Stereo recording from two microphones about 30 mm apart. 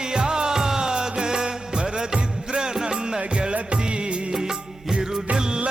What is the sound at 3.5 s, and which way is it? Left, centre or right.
Music, right.